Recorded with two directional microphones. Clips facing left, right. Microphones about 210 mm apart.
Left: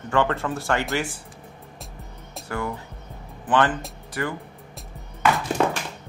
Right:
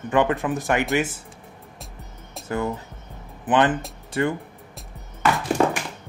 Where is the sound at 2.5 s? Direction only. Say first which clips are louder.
Right 4 dB; 20° right (ahead or behind).